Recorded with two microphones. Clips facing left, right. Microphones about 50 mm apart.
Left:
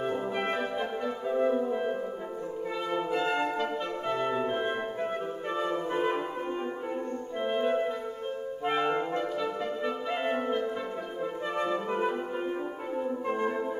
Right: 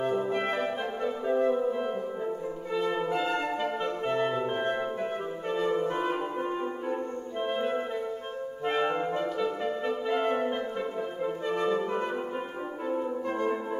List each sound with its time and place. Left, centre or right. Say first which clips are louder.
0.5 s music: right 1 dB; centre
1.4 s music: left 1 dB; centre
3.1 s music: even; centre
3.5 s music: right 1 dB; centre
4.1 s music: right 1 dB; right
5.9 s music: left 1 dB; centre
8.6 s clarinet: even; centre
9.1 s music: right 1 dB; centre
10.0 s music: right 4 dB; centre
11.4 s brass instrument: right 2 dB; centre